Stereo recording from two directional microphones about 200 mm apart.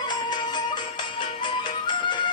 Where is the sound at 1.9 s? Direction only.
25° left (ahead or behind).